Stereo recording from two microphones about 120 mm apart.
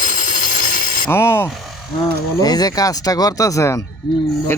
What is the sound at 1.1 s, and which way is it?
Speech, 20° left (ahead or behind).